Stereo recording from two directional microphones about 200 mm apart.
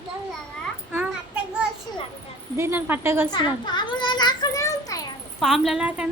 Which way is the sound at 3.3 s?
20° left (ahead or behind).